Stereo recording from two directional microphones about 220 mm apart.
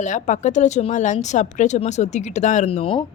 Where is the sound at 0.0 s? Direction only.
35° left (ahead or behind).